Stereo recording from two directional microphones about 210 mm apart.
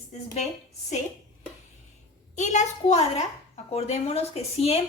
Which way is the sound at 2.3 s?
35° left (ahead or behind).